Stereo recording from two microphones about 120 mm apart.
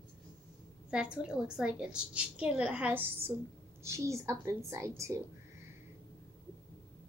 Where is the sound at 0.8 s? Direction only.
10° right (ahead or behind).